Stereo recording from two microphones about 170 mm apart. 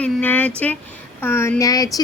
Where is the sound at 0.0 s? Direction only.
10° left (ahead or behind).